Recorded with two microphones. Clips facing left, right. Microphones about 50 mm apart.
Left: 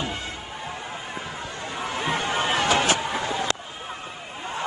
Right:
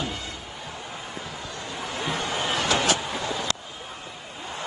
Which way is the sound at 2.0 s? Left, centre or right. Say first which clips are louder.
Left 3 dB; left.